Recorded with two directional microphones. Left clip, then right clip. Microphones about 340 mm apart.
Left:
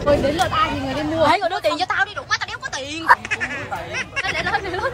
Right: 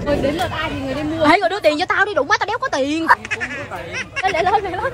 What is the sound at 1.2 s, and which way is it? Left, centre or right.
A woman's voice, right.